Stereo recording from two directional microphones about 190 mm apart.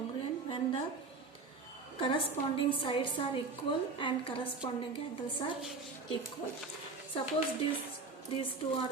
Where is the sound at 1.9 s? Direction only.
25° left (ahead or behind).